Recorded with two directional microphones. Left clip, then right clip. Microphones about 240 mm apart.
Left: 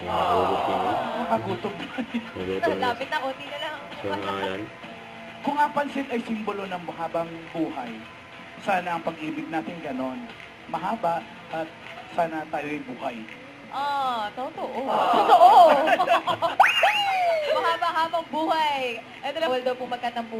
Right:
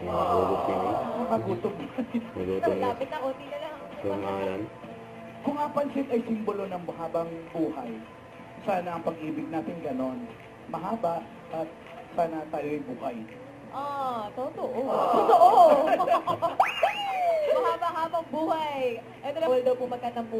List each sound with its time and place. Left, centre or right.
0.0 s a man's voice: centre
5.5 s speech: left
8.6 s speech: centre
14.2 s a man's voice: left